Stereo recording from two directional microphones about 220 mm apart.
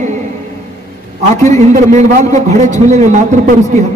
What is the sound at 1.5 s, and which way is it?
A man's voice, 30° right (ahead or behind).